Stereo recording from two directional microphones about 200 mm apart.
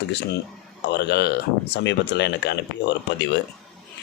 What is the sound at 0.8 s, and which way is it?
Speech, 60° left (ahead or behind).